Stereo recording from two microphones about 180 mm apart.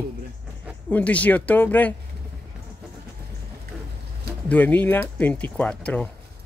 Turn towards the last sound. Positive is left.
turn(degrees=5)  # may be behind; listen again after turning